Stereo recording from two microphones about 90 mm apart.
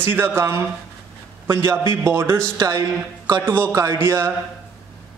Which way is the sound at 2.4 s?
40° right (ahead or behind).